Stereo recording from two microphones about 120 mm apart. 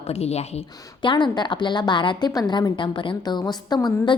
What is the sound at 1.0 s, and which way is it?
A woman's voice, 40° left (ahead or behind).